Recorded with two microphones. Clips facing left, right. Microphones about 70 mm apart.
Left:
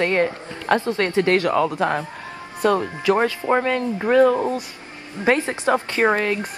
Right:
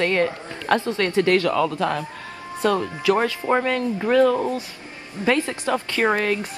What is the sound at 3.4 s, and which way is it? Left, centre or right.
Speech, centre.